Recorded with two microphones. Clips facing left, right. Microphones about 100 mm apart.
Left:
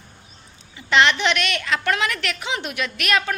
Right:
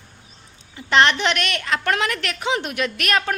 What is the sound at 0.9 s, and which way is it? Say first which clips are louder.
A woman's voice: right 1 dB; 40° right (ahead or behind).